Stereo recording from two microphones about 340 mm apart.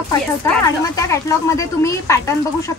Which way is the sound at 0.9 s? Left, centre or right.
Centre.